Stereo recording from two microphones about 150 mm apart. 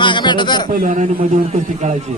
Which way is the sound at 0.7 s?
65° right (ahead or behind).